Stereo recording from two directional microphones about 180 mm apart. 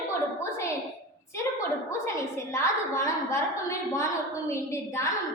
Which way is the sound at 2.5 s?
15° left (ahead or behind).